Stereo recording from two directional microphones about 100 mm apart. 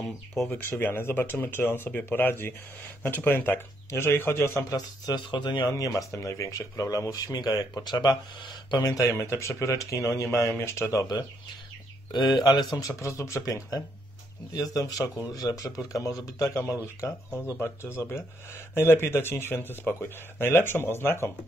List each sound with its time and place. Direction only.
0.7 s speech: 20° left (ahead or behind)
4.6 s speech: 40° left (ahead or behind)
5.7 s speech: 35° left (ahead or behind)
12.7 s speech: 30° left (ahead or behind)